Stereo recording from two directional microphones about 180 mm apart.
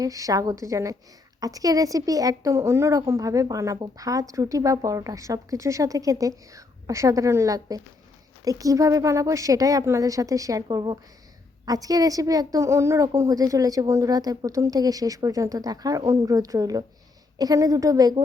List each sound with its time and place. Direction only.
0.0 s a woman's voice: 20° right (ahead or behind)